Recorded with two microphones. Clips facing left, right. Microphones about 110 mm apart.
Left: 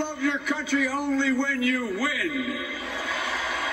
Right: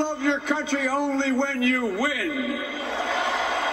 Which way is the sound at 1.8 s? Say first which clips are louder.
Right 3 dB; 45° right (ahead or behind).